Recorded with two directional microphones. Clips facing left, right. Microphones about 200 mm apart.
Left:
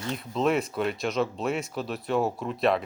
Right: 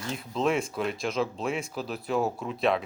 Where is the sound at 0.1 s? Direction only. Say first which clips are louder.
Left 2 dB; centre (ahead or behind).